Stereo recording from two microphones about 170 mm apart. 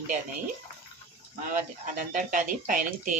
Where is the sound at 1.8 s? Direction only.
50° right (ahead or behind).